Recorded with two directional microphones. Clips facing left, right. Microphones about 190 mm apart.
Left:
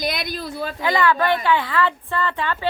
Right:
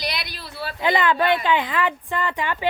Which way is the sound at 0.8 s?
20° right (ahead or behind).